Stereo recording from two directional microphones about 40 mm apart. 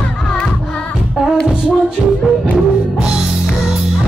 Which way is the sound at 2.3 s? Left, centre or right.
Right.